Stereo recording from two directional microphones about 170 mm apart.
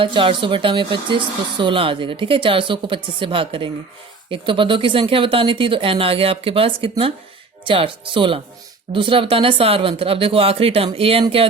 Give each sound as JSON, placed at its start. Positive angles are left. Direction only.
{"t": 0.0, "sound": "speech", "side_deg": -30}